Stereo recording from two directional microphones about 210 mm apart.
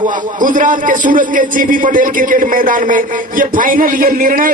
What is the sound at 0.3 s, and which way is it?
A man's voice, 40° right (ahead or behind).